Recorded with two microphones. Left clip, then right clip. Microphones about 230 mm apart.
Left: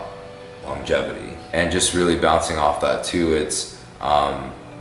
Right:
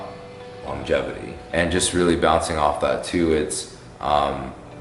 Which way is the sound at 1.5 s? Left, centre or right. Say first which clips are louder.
Left 1 dB; centre.